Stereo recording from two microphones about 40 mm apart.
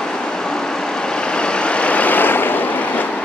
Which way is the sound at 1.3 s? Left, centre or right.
Left.